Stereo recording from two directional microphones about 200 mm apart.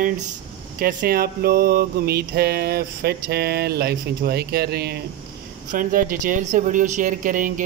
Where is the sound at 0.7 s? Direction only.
45° right (ahead or behind).